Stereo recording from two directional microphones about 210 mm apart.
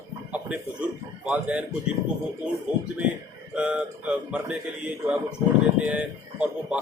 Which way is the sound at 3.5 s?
5° right (ahead or behind).